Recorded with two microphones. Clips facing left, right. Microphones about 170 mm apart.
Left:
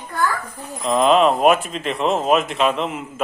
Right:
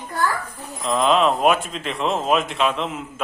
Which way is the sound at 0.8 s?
Centre (ahead or behind).